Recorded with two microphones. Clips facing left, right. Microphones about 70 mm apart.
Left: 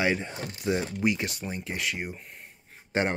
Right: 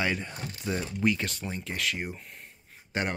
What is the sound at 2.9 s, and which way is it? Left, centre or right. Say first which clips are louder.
Speech: left 4 dB; left.